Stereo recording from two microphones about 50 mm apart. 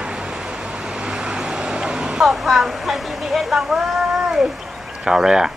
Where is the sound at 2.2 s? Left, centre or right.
Centre.